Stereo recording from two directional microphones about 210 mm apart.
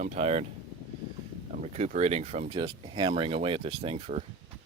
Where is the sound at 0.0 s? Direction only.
30° right (ahead or behind).